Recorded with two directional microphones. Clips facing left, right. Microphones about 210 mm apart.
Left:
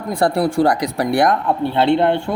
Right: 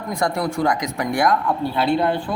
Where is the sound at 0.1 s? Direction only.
30° left (ahead or behind).